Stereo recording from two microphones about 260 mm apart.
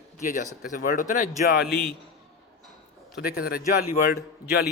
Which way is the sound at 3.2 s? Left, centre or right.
Left.